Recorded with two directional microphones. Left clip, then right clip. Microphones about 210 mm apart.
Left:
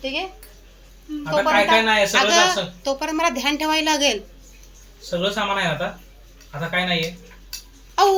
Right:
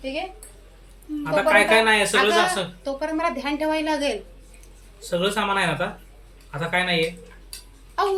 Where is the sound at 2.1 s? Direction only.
35° left (ahead or behind).